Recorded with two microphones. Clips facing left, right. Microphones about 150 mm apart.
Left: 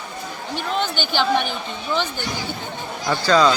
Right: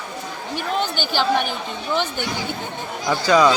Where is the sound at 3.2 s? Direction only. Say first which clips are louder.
Right 1 dB; 15° right (ahead or behind).